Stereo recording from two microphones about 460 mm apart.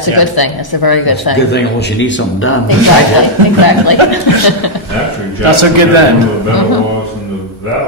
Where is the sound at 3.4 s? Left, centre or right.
Right.